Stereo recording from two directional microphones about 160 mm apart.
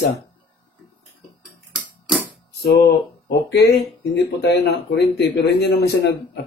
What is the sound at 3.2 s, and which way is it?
Speech, 85° left.